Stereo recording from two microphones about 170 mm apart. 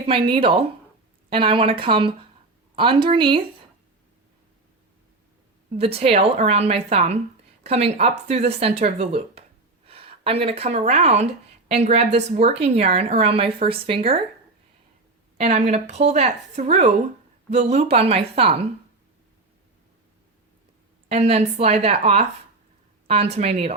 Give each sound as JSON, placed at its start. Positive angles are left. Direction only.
{"t": 0.0, "sound": "a woman's voice", "side_deg": -30}
{"t": 5.7, "sound": "a woman's voice", "side_deg": -35}
{"t": 15.4, "sound": "a woman's voice", "side_deg": -40}
{"t": 21.1, "sound": "a woman's voice", "side_deg": -40}